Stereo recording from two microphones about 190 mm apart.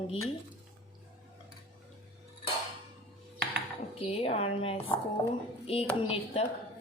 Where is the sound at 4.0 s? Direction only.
30° left (ahead or behind).